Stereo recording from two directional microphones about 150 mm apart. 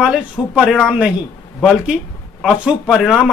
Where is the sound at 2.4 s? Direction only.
5° right (ahead or behind).